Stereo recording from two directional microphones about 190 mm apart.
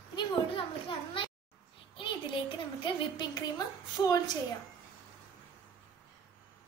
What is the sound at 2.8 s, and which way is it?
A woman's voice, 20° left (ahead or behind).